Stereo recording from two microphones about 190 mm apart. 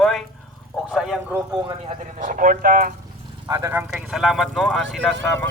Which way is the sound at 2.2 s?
45° right (ahead or behind).